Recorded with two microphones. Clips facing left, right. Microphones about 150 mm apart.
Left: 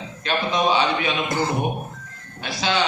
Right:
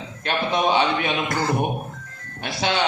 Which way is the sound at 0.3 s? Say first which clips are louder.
Even; 60° right (ahead or behind).